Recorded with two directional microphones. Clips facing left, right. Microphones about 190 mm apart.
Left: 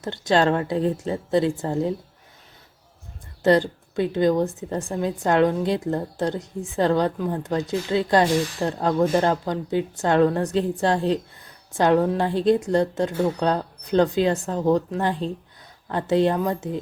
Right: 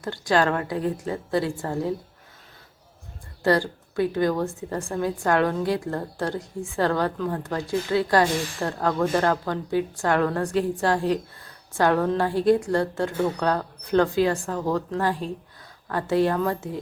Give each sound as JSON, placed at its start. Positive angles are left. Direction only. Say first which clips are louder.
{"t": 0.0, "sound": "a woman's voice", "louder": "left 2 dB", "side_deg": 25}
{"t": 3.4, "sound": "a woman's voice", "louder": "left 3 dB", "side_deg": 20}